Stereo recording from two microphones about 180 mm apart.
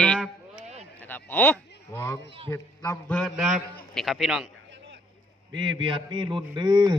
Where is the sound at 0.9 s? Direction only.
10° left (ahead or behind).